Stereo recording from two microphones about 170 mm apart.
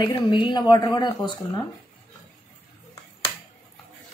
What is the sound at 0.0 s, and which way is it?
Speech, 25° left (ahead or behind).